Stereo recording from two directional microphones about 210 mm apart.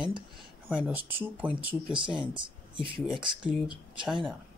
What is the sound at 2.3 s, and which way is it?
Speech, 25° right (ahead or behind).